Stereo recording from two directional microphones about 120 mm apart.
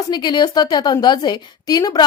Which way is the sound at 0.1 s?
35° left (ahead or behind).